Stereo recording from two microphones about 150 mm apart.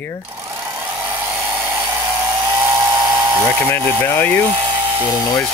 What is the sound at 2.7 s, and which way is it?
Tools, 30° right (ahead or behind).